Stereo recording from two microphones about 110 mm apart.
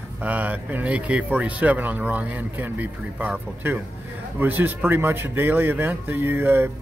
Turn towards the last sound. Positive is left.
turn(degrees=-20)  # may be behind; listen again after turning